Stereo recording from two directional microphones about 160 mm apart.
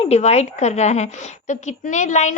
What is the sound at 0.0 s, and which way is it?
A woman's voice, 45° left (ahead or behind).